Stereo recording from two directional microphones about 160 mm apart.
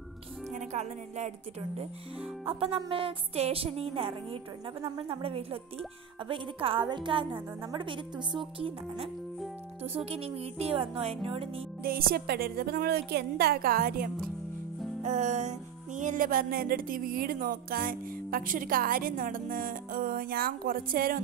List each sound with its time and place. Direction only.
0.5 s speech: 45° right (ahead or behind)
11.8 s a woman's voice: 65° right (ahead or behind)
15.0 s music: 50° right (ahead or behind)